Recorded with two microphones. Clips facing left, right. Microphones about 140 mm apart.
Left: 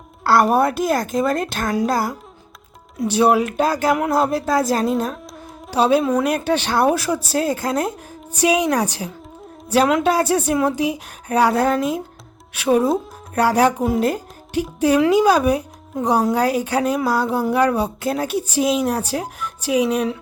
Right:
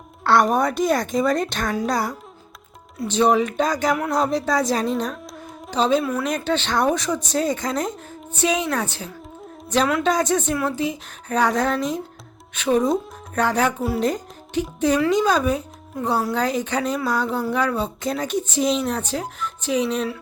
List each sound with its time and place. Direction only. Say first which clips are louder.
0.3 s a woman's voice: left 2 dB; 5° left (ahead or behind)
5.8 s speech: left 4 dB; 15° left (ahead or behind)